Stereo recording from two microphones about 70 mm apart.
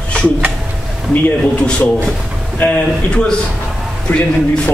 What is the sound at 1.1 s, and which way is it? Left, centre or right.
Speech, centre.